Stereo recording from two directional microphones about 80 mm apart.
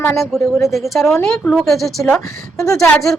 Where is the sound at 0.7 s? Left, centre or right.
Centre.